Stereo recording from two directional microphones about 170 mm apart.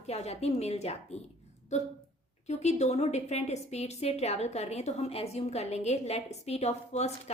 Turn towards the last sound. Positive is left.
turn(degrees=40)  # may be behind; listen again after turning